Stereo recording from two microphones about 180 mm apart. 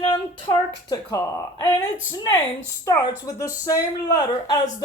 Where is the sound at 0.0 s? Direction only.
30° left (ahead or behind).